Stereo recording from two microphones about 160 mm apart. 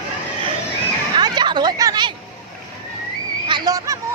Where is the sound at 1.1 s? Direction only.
30° right (ahead or behind).